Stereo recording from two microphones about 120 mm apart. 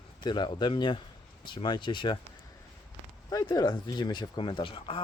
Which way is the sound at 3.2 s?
30° left (ahead or behind).